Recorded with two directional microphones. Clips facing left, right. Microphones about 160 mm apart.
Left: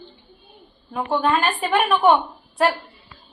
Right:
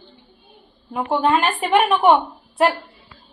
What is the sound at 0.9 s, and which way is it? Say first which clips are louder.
A woman's voice: right 2 dB; 20° right (ahead or behind).